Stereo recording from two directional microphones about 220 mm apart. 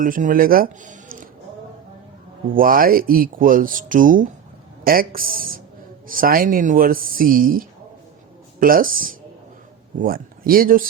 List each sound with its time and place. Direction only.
0.0 s speech: 35° right (ahead or behind)
2.5 s speech: 40° right (ahead or behind)